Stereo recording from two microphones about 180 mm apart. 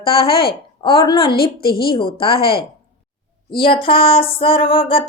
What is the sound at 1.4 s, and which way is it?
Speech, 60° left (ahead or behind).